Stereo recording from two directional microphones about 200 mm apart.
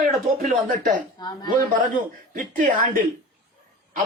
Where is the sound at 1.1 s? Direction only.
20° left (ahead or behind).